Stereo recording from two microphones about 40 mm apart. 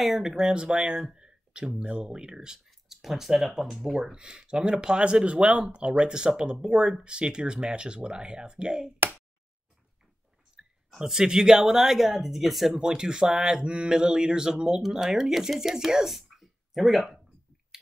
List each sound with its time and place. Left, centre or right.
0.0 s speech: centre
0.4 s speech: centre
1.1 s a sound: right
1.7 s speech: right; by 4.1 s centre
4.1 s speech: right
10.6 s a sound: right
11.0 s speech: centre
12.7 s speech: right; by 17.1 s centre